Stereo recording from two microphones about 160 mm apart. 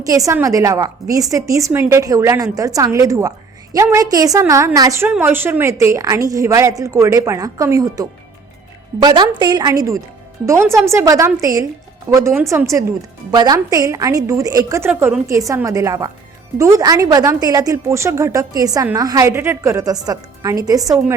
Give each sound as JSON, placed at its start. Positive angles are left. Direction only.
{"t": 0.0, "sound": "a woman's voice", "side_deg": -20}